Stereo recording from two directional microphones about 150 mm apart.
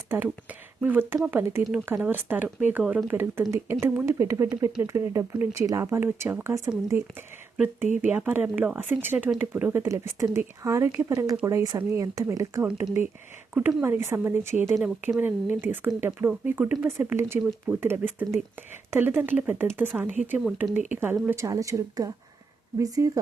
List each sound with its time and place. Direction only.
0.8 s speech: 10° right (ahead or behind)
8.0 s speech: 10° right (ahead or behind)
14.8 s speech: 5° right (ahead or behind); by 23.1 s 25° right (ahead or behind)